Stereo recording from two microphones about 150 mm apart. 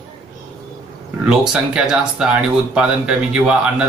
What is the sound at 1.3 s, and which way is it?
A man's voice, 5° right (ahead or behind).